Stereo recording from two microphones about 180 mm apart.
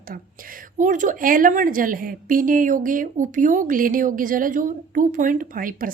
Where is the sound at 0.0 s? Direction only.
50° right (ahead or behind).